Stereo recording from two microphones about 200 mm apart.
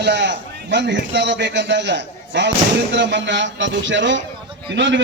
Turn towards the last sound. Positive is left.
turn(degrees=-65)  # may be behind; listen again after turning